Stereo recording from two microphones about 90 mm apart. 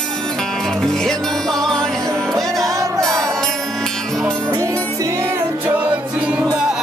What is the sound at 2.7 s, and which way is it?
Music, 35° right (ahead or behind).